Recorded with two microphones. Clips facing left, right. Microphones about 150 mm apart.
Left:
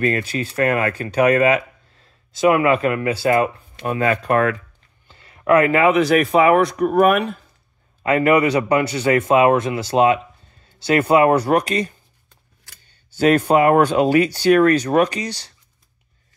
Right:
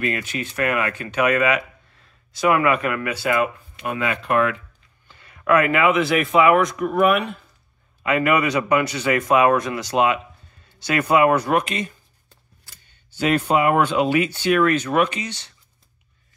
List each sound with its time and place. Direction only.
0.0 s speech: 35° left (ahead or behind)
5.0 s speech: 30° left (ahead or behind)
13.1 s speech: 40° left (ahead or behind)